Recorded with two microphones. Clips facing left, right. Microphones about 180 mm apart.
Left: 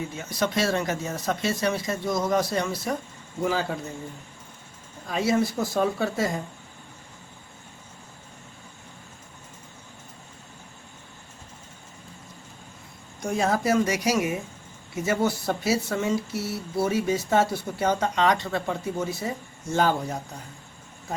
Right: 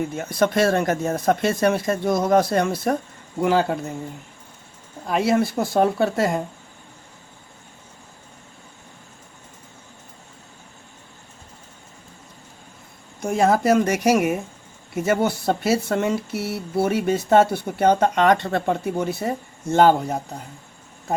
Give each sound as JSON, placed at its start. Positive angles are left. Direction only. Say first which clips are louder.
{"t": 0.0, "sound": "speech", "louder": "right 7 dB", "side_deg": -55}
{"t": 5.0, "sound": "speech", "louder": "right 4 dB", "side_deg": -60}
{"t": 13.1, "sound": "speech", "louder": "right 6 dB", "side_deg": -55}